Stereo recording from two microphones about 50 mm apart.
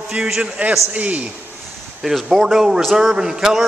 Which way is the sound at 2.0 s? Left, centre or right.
Centre.